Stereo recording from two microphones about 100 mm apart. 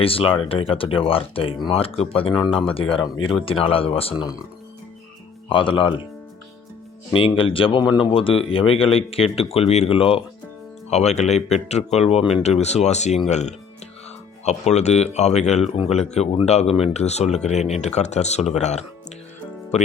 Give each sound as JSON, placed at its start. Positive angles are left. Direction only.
{"t": 0.0, "sound": "speech", "side_deg": 70}
{"t": 5.5, "sound": "speech", "side_deg": 60}
{"t": 7.1, "sound": "speech", "side_deg": 60}
{"t": 10.8, "sound": "speech", "side_deg": 90}
{"t": 14.4, "sound": "speech", "side_deg": 90}